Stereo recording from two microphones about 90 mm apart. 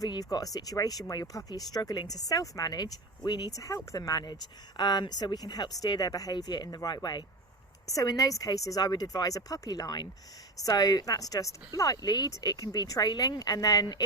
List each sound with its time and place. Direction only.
0.0 s speech: 45° left (ahead or behind)